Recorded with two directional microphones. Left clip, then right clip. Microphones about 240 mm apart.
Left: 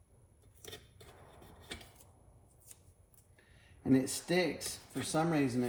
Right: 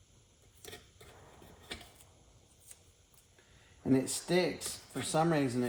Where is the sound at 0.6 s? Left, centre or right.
Centre.